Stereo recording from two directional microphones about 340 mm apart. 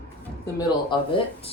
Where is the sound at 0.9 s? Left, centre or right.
Centre.